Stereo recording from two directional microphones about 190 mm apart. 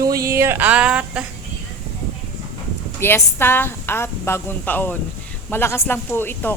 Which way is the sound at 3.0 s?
10° left (ahead or behind).